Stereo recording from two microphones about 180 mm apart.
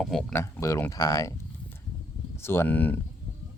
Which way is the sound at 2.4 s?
10° left (ahead or behind).